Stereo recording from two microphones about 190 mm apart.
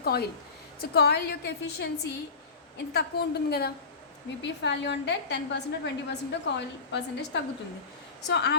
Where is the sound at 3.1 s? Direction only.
55° left (ahead or behind).